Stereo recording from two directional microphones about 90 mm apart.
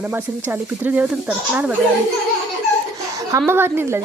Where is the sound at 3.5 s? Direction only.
25° right (ahead or behind).